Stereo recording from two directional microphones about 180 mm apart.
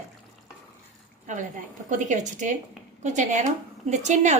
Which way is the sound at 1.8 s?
45° right (ahead or behind).